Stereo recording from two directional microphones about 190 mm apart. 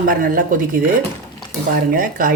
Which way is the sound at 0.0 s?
45° right (ahead or behind).